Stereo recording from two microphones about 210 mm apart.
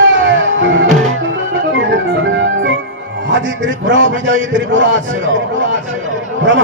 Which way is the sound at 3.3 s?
60° right (ahead or behind).